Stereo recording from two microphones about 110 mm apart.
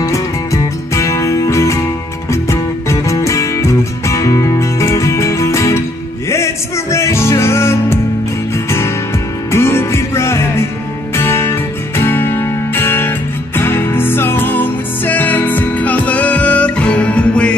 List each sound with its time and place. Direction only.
0.0 s music: 30° left (ahead or behind); by 17.6 s 10° left (ahead or behind)